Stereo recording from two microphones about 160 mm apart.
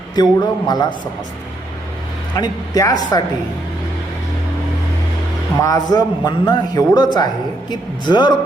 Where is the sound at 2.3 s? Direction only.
20° left (ahead or behind).